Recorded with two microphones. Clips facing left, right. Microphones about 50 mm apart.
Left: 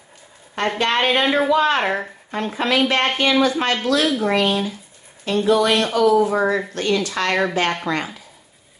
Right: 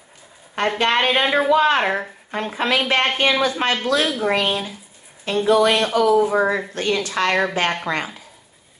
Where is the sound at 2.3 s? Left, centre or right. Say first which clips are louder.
Left 1 dB; right.